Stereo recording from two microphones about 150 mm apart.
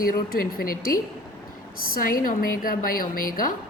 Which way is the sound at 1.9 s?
70° left (ahead or behind).